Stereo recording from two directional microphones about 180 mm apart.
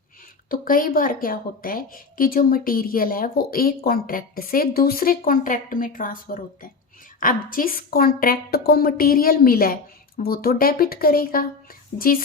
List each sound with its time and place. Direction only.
0.4 s speech: 50° left (ahead or behind)